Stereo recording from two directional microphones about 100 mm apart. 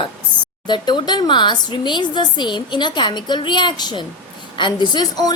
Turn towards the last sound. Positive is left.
turn(degrees=40)  # may be behind; listen again after turning